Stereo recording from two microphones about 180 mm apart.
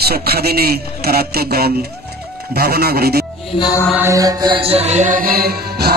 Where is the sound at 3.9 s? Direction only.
15° right (ahead or behind); by 5.9 s 60° right (ahead or behind).